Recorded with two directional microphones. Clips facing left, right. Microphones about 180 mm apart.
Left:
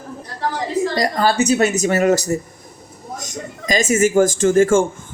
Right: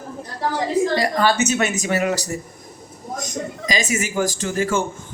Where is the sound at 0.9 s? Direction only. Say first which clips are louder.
Left 1 dB; 40° left (ahead or behind).